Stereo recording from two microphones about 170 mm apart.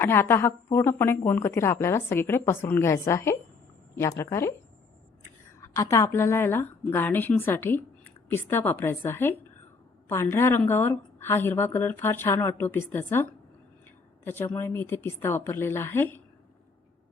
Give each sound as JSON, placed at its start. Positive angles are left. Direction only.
{"t": 0.0, "sound": "a woman's voice", "side_deg": 15}
{"t": 5.5, "sound": "a woman's voice", "side_deg": 20}
{"t": 14.3, "sound": "a woman's voice", "side_deg": 15}